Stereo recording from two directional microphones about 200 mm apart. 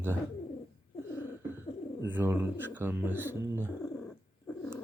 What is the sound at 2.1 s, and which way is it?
Speech, 10° right (ahead or behind).